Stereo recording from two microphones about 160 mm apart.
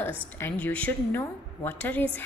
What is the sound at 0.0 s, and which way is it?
A woman's voice, 10° left (ahead or behind).